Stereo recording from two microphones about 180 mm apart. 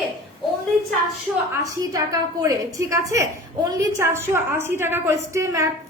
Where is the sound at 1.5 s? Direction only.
20° right (ahead or behind).